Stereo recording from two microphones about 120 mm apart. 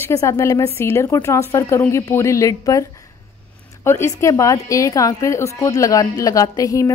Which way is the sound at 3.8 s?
25° left (ahead or behind).